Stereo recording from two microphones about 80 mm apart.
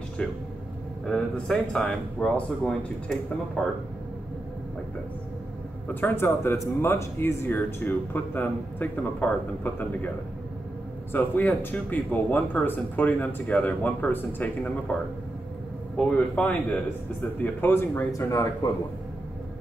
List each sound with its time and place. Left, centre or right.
0.2 s speech: centre
1.5 s speech: centre
3.6 s speech: centre
5.9 s speech: left
16.0 s speech: centre
17.4 s speech: left
18.1 s speech: left